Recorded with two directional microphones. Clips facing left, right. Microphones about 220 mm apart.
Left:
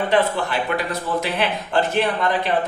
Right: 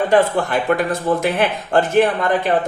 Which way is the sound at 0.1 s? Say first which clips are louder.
Right 4 dB; 50° right (ahead or behind).